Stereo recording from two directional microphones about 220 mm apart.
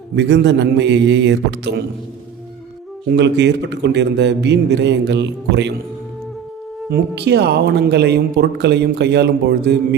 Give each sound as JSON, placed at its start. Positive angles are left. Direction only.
{"t": 0.2, "sound": "speech", "side_deg": -50}
{"t": 3.1, "sound": "speech", "side_deg": -50}
{"t": 6.9, "sound": "speech", "side_deg": -50}